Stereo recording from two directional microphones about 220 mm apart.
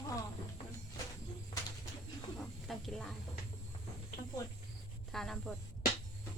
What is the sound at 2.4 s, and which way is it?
Snake, centre (ahead or behind).